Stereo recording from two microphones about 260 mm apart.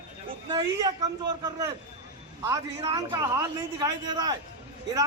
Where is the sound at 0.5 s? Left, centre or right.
Centre.